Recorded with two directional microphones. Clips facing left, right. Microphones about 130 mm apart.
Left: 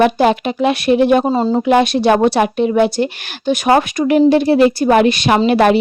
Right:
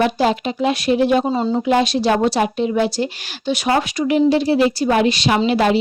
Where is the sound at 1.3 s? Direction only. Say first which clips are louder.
Left 4 dB; 40° left (ahead or behind).